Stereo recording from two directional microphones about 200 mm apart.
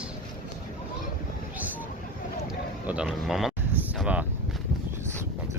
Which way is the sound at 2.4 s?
5° right (ahead or behind).